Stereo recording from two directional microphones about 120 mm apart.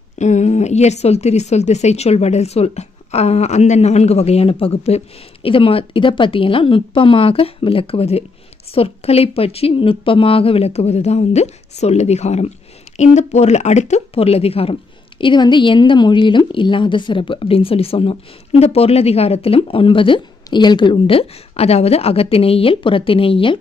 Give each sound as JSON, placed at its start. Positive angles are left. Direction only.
{"t": 0.2, "sound": "a woman's voice", "side_deg": 75}